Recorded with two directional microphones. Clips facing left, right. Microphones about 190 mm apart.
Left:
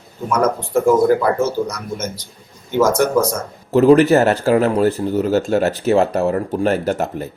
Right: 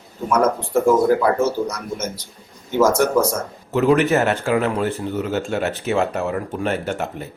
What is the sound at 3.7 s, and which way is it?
Speech, 35° left (ahead or behind).